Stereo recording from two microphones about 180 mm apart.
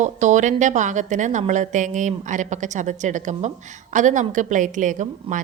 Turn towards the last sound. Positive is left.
turn(degrees=-45)  # may be behind; listen again after turning